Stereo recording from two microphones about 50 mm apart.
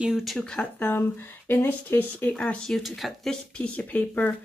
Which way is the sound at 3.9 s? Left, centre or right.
Left.